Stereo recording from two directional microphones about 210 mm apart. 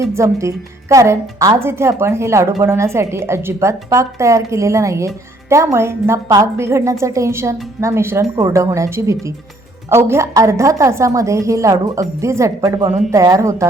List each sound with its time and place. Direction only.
0.1 s a woman's voice: 15° right (ahead or behind)